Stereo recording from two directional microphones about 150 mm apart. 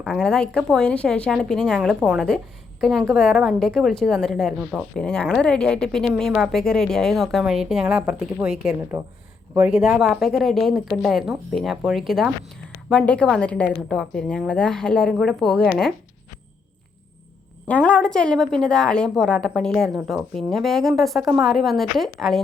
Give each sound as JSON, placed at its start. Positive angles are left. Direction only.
{"t": 0.0, "sound": "speech", "side_deg": 5}
{"t": 7.9, "sound": "a woman's voice", "side_deg": -15}
{"t": 9.6, "sound": "speech", "side_deg": -5}
{"t": 17.7, "sound": "speech", "side_deg": 10}